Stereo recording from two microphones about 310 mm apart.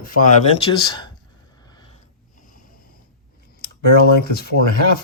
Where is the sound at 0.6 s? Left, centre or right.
Centre.